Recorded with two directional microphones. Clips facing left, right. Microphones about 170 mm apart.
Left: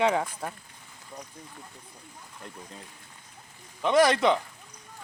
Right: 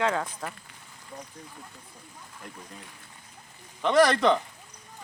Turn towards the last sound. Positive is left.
turn(degrees=10)  # may be behind; listen again after turning